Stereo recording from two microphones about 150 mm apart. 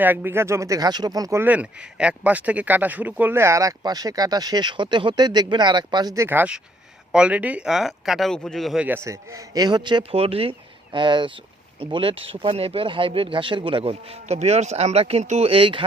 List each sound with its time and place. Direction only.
0.0 s speech: 10° right (ahead or behind)
6.2 s speech: 10° right (ahead or behind); by 15.8 s 35° right (ahead or behind)